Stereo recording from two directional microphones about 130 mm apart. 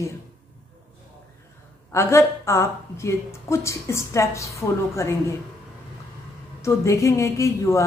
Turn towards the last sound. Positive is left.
turn(degrees=25)  # may be behind; listen again after turning